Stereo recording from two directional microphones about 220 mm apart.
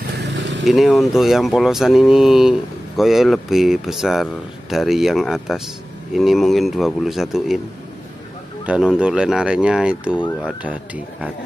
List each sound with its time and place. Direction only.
0.2 s vehicle: 55° right (ahead or behind)
0.7 s speech: centre (ahead or behind)
8.6 s speech: 5° right (ahead or behind)